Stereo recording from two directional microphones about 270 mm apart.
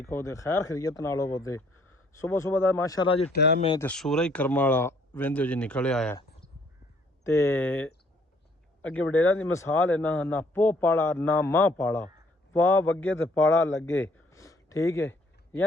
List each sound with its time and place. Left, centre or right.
0.0 s speech: centre
3.3 s speech: left
3.8 s speech: centre
7.3 s speech: centre
13.8 s a sound: centre